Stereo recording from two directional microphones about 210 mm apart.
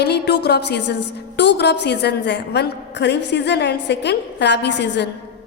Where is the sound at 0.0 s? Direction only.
50° left (ahead or behind).